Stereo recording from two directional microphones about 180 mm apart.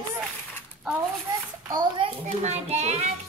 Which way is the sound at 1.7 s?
25° right (ahead or behind).